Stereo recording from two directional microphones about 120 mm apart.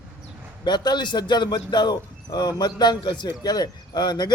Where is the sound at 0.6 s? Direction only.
35° left (ahead or behind).